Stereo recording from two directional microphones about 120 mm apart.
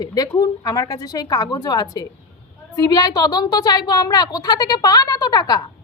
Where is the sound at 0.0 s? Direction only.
30° left (ahead or behind).